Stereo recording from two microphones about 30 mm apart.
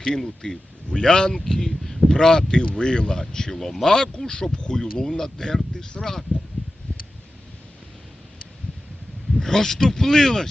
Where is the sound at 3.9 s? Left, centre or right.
Left.